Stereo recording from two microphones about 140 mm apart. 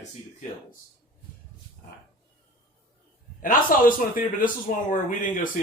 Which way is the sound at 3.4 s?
80° left.